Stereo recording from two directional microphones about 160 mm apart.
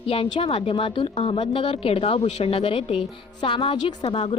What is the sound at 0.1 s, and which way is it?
A woman's voice, 35° left (ahead or behind).